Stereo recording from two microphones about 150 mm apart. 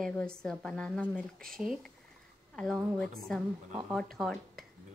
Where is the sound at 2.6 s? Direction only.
Centre (ahead or behind).